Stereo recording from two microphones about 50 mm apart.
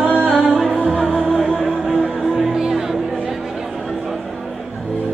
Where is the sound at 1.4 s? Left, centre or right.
Centre.